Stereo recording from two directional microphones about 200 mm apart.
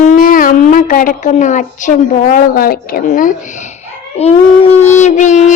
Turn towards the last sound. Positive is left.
turn(degrees=35)  # may be behind; listen again after turning